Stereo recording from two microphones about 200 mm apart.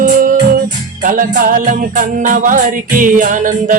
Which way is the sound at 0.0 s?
40° right (ahead or behind).